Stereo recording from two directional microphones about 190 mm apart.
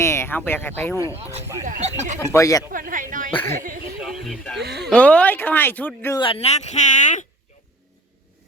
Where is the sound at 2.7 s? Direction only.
45° right (ahead or behind).